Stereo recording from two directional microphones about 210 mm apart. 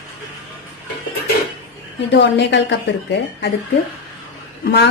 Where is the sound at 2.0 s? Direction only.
55° left (ahead or behind).